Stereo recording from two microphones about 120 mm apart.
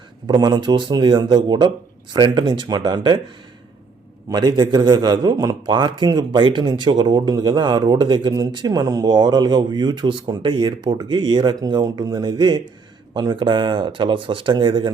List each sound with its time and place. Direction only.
0.3 s a man's voice: 35° right (ahead or behind)
4.3 s a man's voice: 40° right (ahead or behind)